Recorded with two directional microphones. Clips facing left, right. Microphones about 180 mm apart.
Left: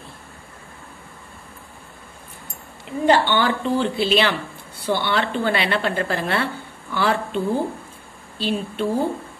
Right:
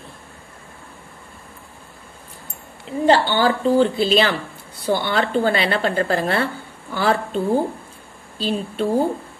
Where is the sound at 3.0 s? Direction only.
35° right (ahead or behind).